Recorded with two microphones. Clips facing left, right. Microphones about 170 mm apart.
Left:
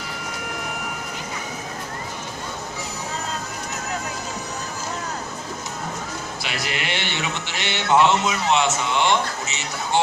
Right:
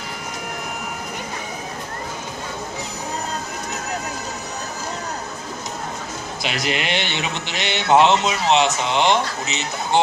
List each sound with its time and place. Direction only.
6.4 s speech: 20° right (ahead or behind)